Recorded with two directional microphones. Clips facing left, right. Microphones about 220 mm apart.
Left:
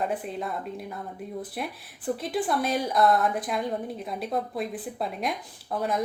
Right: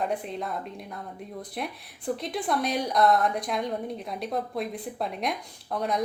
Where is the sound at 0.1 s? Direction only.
5° left (ahead or behind).